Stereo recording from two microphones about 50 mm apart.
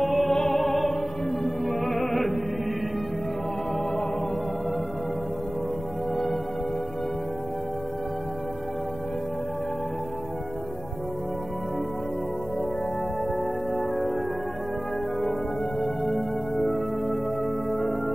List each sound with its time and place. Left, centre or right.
0.0 s music: centre
13.7 s music: centre
15.8 s music: centre